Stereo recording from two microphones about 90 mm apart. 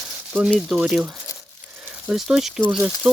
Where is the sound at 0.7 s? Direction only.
10° right (ahead or behind).